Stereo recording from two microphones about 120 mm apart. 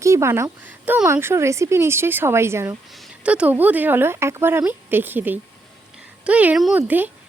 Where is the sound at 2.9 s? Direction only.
Centre (ahead or behind).